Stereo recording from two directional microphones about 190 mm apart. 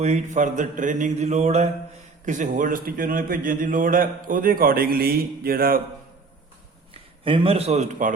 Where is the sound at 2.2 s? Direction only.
40° right (ahead or behind).